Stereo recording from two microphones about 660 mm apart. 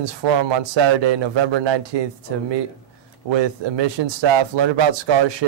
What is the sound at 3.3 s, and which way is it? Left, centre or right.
A man's voice, right.